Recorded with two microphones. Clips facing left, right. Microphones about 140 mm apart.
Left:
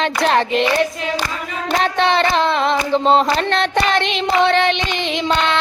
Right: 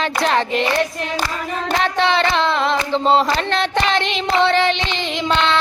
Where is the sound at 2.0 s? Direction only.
50° left (ahead or behind).